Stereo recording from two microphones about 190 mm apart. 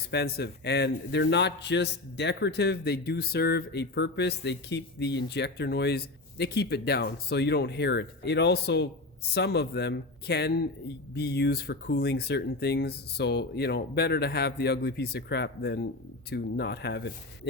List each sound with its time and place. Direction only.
0.1 s a man's voice: 60° left (ahead or behind)